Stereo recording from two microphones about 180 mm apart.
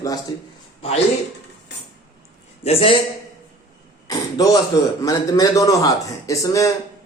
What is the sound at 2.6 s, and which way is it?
Speech, 35° left (ahead or behind).